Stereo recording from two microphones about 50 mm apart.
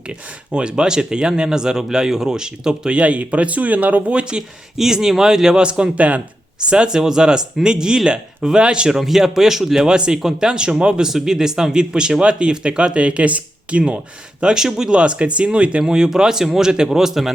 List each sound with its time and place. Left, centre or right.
0.1 s speech: centre
4.8 s speech: centre; by 6.2 s right
6.7 s speech: centre
9.0 s speech: centre; by 14.0 s right
14.4 s speech: centre